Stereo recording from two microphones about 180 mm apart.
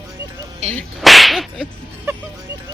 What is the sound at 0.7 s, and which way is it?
Speech, centre (ahead or behind).